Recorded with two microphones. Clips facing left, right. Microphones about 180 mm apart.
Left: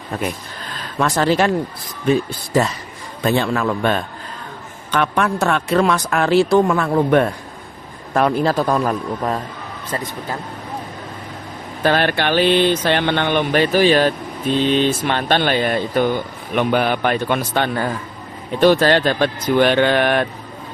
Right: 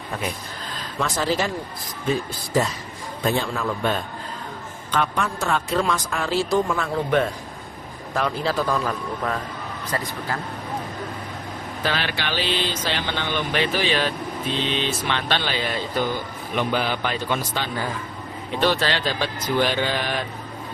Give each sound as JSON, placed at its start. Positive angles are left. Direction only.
{"t": 0.9, "sound": "a man's voice", "side_deg": 70}
{"t": 11.8, "sound": "a man's voice", "side_deg": 50}
{"t": 18.6, "sound": "a man's voice", "side_deg": 50}